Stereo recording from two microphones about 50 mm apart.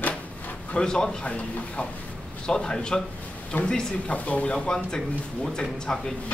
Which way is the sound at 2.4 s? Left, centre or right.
Centre.